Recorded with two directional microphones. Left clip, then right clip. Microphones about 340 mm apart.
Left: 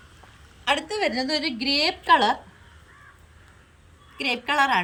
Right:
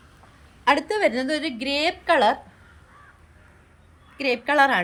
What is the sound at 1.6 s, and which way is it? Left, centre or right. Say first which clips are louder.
Speech: left 1 dB; centre.